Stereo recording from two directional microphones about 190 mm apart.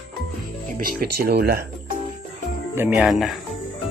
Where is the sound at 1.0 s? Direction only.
55° right (ahead or behind).